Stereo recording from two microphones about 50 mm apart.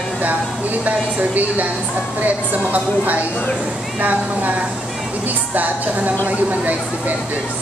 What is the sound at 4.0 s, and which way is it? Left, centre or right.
Speech, right.